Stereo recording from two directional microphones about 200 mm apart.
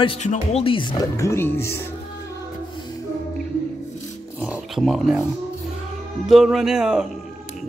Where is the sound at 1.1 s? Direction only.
15° left (ahead or behind).